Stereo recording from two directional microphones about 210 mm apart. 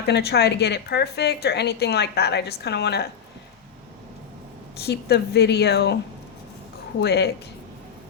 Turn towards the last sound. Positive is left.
turn(degrees=50)  # may be behind; listen again after turning